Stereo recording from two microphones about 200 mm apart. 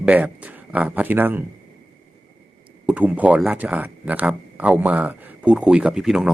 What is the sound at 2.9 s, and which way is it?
Speech, 5° right (ahead or behind).